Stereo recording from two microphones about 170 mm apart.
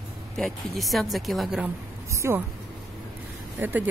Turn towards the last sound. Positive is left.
turn(degrees=-10)  # may be behind; listen again after turning